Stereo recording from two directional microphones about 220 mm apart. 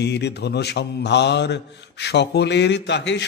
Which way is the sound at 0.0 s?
50° left (ahead or behind).